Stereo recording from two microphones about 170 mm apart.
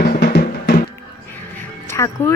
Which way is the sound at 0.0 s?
65° left (ahead or behind).